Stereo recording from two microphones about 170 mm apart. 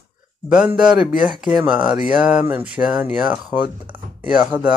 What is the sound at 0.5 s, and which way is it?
Speech, 5° right (ahead or behind).